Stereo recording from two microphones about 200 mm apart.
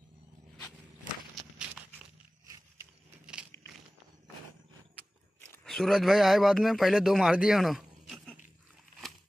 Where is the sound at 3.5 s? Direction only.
60° left (ahead or behind).